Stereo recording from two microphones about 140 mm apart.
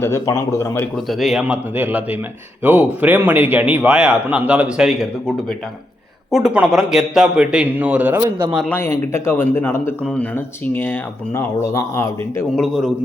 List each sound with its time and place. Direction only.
0.0 s speech: 20° left (ahead or behind)
1.0 s a man's voice: centre (ahead or behind)
6.3 s a man's voice: 5° right (ahead or behind)
8.7 s speech: 15° left (ahead or behind)
12.5 s a man's voice: centre (ahead or behind)